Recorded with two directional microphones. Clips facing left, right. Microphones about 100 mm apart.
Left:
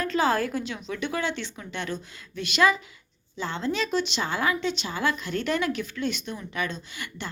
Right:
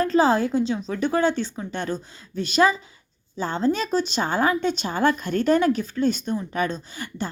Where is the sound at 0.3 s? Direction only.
25° right (ahead or behind).